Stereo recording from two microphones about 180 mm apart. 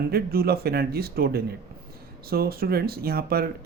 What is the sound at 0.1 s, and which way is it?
Speech, 60° right (ahead or behind).